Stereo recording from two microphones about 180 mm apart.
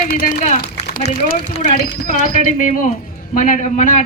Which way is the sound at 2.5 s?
45° left (ahead or behind).